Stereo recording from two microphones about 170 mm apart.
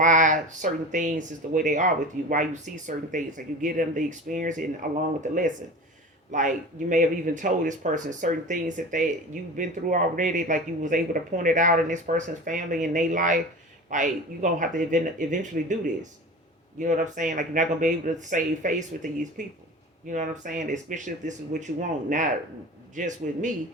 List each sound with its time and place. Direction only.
0.0 s speech: 50° right (ahead or behind)
6.3 s speech: 50° right (ahead or behind)